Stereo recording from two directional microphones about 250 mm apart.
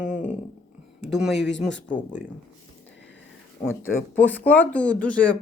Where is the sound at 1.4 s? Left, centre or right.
Left.